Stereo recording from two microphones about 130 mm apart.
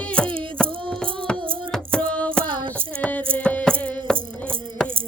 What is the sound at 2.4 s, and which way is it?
Child singing, 40° right (ahead or behind).